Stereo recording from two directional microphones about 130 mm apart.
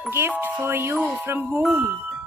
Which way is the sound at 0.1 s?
15° right (ahead or behind).